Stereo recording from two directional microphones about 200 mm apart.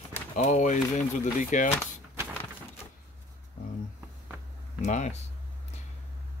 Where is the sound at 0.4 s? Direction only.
40° left (ahead or behind).